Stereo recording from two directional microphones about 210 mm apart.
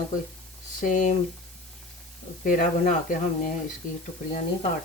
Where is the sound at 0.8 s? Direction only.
35° left (ahead or behind).